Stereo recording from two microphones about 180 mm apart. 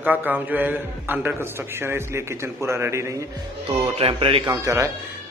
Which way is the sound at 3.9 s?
30° right (ahead or behind).